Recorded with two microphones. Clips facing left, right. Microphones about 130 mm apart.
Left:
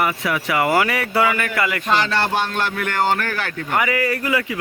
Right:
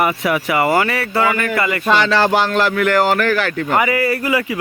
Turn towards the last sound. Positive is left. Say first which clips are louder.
# right 3 dB
turn(degrees=-10)  # may be behind; listen again after turning